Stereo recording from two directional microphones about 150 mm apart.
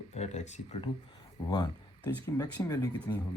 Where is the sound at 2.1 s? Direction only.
15° left (ahead or behind).